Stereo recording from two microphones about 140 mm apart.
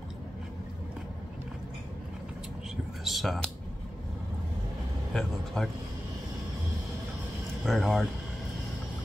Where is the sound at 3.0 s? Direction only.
Centre (ahead or behind).